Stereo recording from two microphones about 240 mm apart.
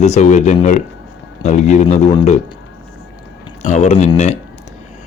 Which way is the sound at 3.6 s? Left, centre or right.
Left.